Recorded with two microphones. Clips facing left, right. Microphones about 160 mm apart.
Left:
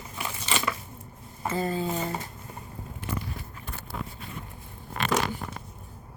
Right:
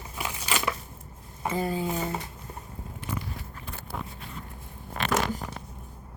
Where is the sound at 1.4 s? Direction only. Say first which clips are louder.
Even; 10° right (ahead or behind).